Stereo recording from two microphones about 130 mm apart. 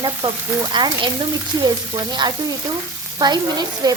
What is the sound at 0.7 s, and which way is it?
Frying, 35° right (ahead or behind).